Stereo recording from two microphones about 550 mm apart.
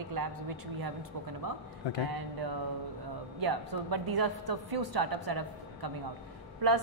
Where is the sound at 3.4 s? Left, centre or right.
Right.